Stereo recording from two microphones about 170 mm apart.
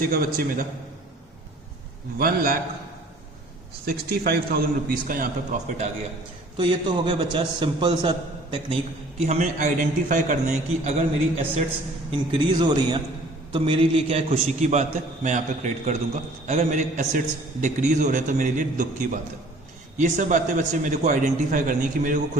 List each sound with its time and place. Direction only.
0.0 s a man's voice: 60° right (ahead or behind)
2.1 s a man's voice: 60° right (ahead or behind)
3.8 s a man's voice: 65° right (ahead or behind); by 5.9 s 45° right (ahead or behind)
6.6 s a man's voice: 30° right (ahead or behind)
12.1 s a man's voice: 30° right (ahead or behind); by 22.2 s 50° right (ahead or behind)